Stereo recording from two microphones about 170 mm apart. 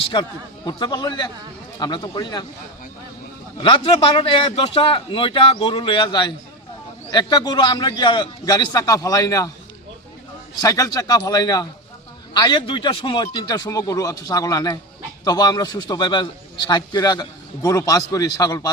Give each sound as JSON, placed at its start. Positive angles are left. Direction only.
{"t": 0.1, "sound": "a man's voice", "side_deg": 25}
{"t": 3.6, "sound": "a man's voice", "side_deg": 30}
{"t": 10.6, "sound": "a man's voice", "side_deg": 20}